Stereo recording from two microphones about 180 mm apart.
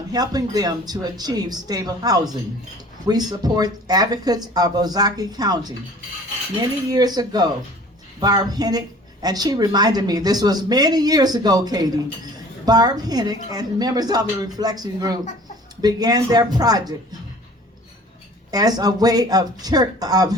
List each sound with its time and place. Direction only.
0.1 s a woman's voice: 20° right (ahead or behind)
6.6 s a woman's voice: 20° right (ahead or behind)
18.5 s a woman's voice: 20° right (ahead or behind)